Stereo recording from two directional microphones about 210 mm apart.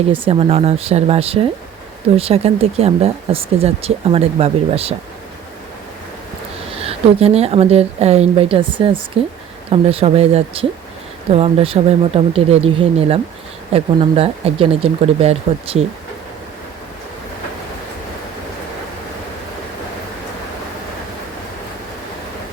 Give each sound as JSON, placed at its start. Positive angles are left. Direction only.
{"t": 0.1, "sound": "speech", "side_deg": -25}
{"t": 6.8, "sound": "speech", "side_deg": -30}